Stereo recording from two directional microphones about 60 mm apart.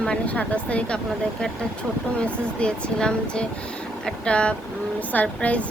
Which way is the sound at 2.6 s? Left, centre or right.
Centre.